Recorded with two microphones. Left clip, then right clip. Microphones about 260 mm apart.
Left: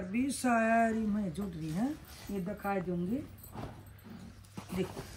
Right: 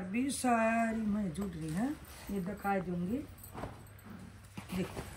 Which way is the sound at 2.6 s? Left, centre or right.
Centre.